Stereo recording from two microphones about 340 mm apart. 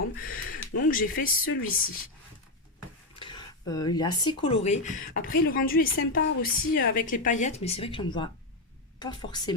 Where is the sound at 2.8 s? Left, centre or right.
Centre.